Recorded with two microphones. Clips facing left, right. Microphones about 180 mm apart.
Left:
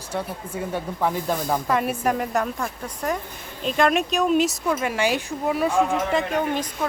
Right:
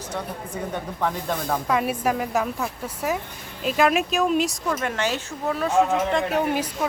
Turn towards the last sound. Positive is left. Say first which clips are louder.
# right 1 dB
turn(degrees=-10)  # may be behind; listen again after turning